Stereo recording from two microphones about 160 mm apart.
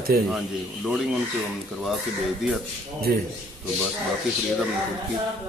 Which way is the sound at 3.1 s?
65° right (ahead or behind).